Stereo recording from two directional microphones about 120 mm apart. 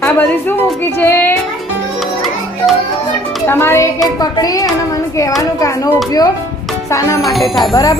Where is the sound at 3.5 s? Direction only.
20° left (ahead or behind).